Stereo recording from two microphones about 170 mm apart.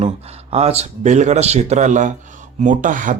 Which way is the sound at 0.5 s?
40° right (ahead or behind).